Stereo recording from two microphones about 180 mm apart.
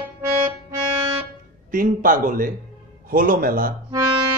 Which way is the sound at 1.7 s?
50° right (ahead or behind).